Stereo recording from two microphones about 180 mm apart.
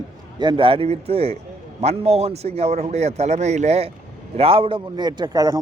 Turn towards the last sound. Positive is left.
turn(degrees=-20)  # may be behind; listen again after turning